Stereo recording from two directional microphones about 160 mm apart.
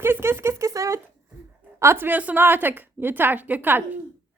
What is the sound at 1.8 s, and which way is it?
A woman's voice, 15° right (ahead or behind).